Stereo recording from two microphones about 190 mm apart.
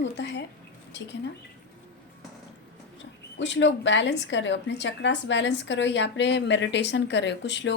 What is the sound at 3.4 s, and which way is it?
A woman's voice, 70° left (ahead or behind).